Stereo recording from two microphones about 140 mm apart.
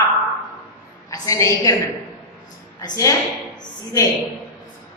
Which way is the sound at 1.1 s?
20° left (ahead or behind).